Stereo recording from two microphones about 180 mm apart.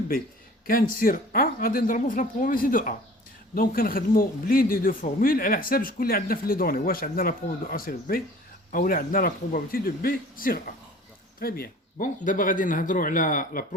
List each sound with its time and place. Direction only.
0.9 s a man's voice: 55° left (ahead or behind)